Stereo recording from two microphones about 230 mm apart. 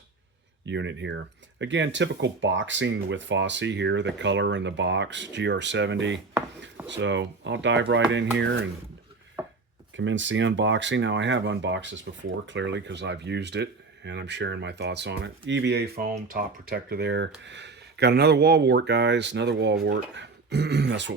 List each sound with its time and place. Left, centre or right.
0.6 s speech: right
9.4 s chopping: centre
9.9 s speech: right